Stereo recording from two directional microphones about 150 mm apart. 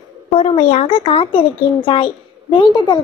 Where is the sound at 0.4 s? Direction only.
45° left (ahead or behind).